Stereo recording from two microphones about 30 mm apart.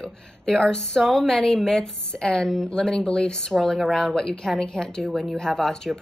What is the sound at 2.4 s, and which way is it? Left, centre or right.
A woman's voice, centre.